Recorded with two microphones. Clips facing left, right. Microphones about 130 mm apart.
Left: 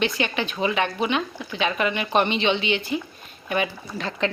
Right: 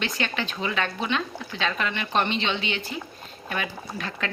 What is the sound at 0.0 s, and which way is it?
A woman's voice, 15° left (ahead or behind).